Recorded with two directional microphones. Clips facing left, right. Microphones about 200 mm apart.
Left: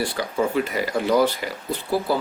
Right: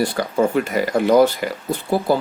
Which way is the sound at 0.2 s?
50° right (ahead or behind).